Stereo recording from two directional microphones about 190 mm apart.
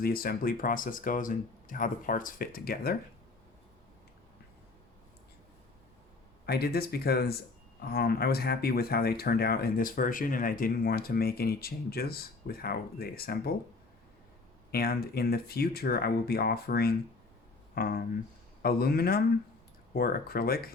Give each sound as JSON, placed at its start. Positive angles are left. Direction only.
{"t": 0.0, "sound": "speech", "side_deg": 50}
{"t": 6.4, "sound": "speech", "side_deg": 55}
{"t": 14.7, "sound": "speech", "side_deg": 55}